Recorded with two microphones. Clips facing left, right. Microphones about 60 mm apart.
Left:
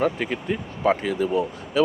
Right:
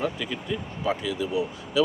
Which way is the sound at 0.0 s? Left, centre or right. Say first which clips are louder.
Left 6 dB; left.